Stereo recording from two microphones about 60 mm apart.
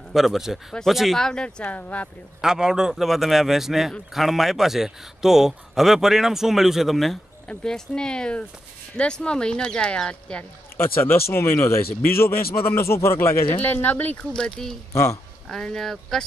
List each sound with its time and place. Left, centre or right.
0.1 s a man's voice: centre
1.2 s speech: centre
1.6 s speech: left
2.4 s a man's voice: centre
7.4 s speech: centre
10.8 s a man's voice: left
13.5 s speech: left
14.3 s speech: centre
14.9 s speech: left
15.4 s speech: centre